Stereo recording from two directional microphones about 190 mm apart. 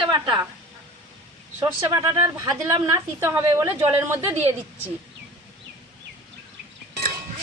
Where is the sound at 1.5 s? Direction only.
10° right (ahead or behind).